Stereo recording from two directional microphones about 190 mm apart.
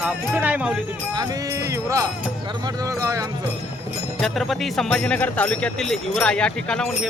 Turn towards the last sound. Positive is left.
turn(degrees=5)  # may be behind; listen again after turning